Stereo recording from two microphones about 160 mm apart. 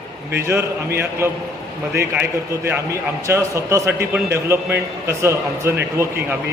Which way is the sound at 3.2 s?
20° right (ahead or behind).